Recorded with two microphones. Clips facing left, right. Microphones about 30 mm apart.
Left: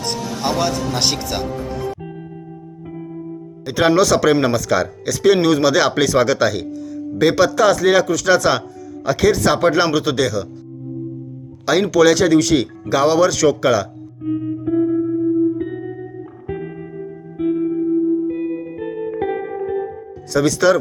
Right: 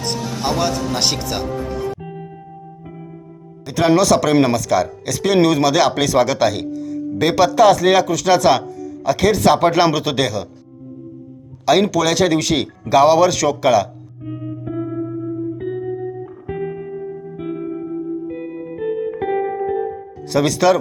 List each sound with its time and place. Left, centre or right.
0.0 s speech: centre
3.7 s speech: left
4.0 s speech: centre
4.5 s speech: centre
5.0 s speech: centre
11.9 s speech: centre
12.1 s speech: centre
14.3 s music: centre
20.3 s speech: centre